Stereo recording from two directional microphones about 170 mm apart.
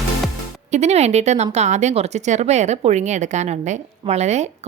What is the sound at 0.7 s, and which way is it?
Speech, 40° right (ahead or behind).